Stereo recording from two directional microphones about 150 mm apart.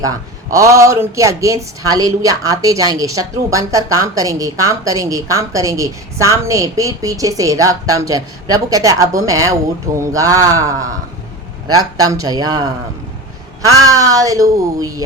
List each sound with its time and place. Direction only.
0.0 s speech: 20° right (ahead or behind)